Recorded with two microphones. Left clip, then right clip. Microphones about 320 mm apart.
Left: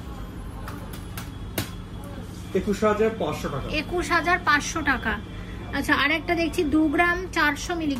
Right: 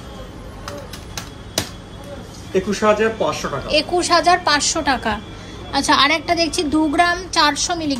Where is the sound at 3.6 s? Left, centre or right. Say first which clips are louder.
Right 11 dB; centre.